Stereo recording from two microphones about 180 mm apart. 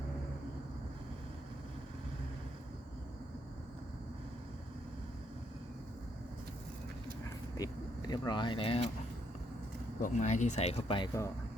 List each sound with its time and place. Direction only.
7.5 s speech: 20° left (ahead or behind)
10.0 s speech: 40° left (ahead or behind)